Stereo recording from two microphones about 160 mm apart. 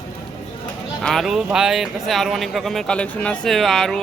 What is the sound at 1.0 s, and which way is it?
Speech, centre (ahead or behind).